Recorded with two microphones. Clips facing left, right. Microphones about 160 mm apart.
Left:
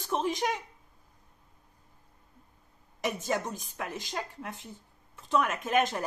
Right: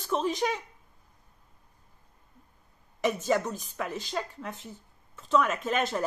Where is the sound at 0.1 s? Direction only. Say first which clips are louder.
Right 2 dB; 15° left (ahead or behind).